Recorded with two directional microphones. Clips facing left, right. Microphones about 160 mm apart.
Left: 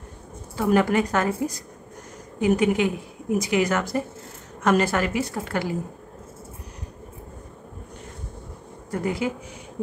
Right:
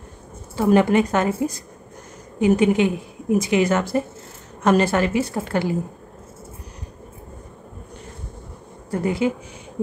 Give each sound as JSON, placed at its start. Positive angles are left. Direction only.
{"t": 0.6, "sound": "a woman's voice", "side_deg": -25}
{"t": 2.4, "sound": "a woman's voice", "side_deg": -25}
{"t": 8.9, "sound": "a woman's voice", "side_deg": -25}